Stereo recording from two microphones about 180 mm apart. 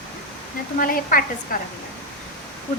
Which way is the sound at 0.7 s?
50° left (ahead or behind).